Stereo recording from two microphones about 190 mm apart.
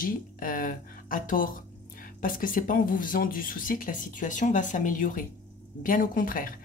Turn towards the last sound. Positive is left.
turn(degrees=45)  # may be behind; listen again after turning